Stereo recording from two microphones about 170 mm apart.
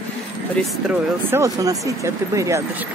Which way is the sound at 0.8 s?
15° right (ahead or behind).